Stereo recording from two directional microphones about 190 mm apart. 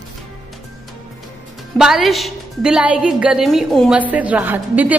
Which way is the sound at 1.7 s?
Centre (ahead or behind).